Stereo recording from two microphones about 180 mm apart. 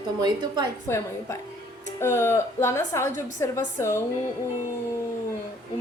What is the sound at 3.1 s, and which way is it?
Speech, 45° right (ahead or behind).